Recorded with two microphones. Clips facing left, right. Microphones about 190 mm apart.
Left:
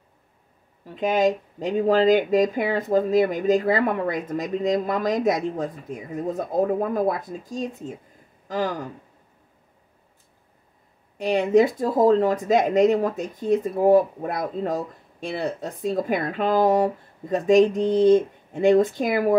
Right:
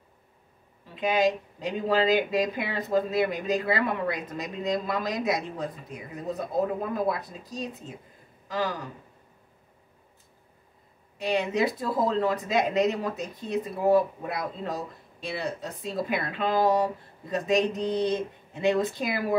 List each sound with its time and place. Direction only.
0.9 s speech: 45° left (ahead or behind)
11.1 s speech: 50° left (ahead or behind)